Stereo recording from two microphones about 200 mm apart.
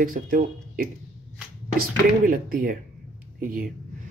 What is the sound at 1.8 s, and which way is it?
Speech, 45° right (ahead or behind).